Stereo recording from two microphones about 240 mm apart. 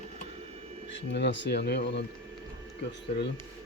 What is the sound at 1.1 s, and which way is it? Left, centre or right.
Speech, left.